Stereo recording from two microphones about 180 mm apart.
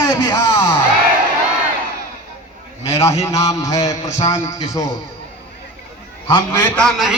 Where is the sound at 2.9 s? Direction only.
15° left (ahead or behind).